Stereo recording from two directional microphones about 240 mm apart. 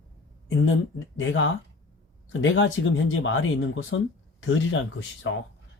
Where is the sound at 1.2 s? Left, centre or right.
Left.